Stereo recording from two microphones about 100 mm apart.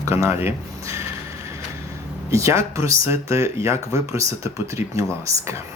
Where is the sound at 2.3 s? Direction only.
30° right (ahead or behind).